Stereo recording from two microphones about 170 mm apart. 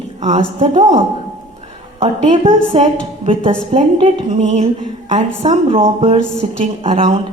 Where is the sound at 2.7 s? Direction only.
35° right (ahead or behind).